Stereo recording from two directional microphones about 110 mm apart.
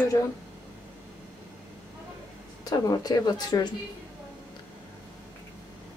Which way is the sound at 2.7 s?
35° left (ahead or behind).